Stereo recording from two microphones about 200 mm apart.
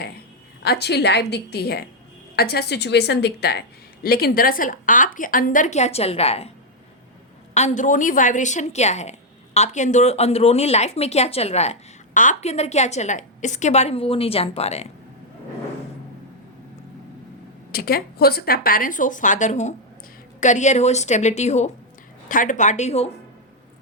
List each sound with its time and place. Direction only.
0.6 s a woman's voice: 55° left (ahead or behind); by 6.5 s 30° left (ahead or behind)
7.5 s a woman's voice: 35° left (ahead or behind)
17.7 s a woman's voice: 50° left (ahead or behind); by 23.1 s 30° left (ahead or behind)